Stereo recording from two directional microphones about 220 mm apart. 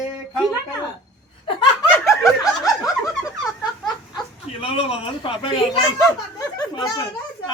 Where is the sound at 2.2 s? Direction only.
15° left (ahead or behind).